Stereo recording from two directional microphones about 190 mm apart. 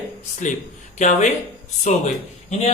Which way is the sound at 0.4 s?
40° left (ahead or behind).